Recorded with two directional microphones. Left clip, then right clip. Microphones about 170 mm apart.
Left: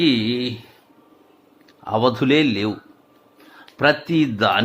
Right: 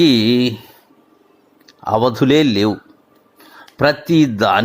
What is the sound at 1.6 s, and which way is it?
Speech, 30° right (ahead or behind).